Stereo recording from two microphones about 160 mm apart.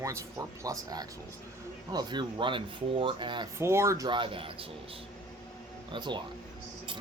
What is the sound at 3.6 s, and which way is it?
Speech, 15° right (ahead or behind).